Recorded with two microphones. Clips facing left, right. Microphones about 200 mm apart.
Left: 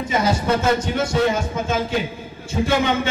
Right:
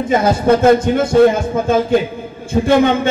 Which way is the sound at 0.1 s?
55° right (ahead or behind).